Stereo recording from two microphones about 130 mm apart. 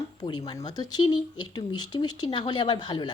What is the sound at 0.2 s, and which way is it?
A woman's voice, 35° left (ahead or behind).